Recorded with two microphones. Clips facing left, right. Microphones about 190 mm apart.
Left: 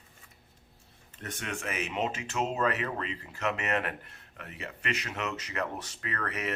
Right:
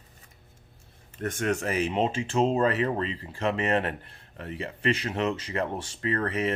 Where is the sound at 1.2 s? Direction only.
50° right (ahead or behind).